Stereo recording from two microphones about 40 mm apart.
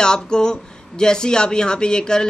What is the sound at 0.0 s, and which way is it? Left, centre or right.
Speech, centre.